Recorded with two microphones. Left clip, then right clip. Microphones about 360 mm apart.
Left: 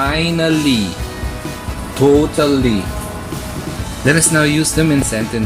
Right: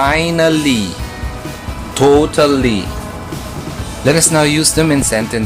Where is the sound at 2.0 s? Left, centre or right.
Right.